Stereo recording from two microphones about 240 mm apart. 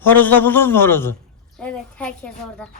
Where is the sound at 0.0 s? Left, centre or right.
Centre.